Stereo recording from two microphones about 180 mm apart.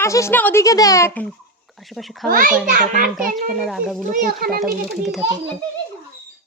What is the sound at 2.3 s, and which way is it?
Speech, 50° right (ahead or behind).